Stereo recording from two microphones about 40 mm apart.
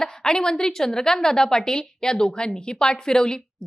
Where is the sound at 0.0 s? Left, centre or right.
Centre.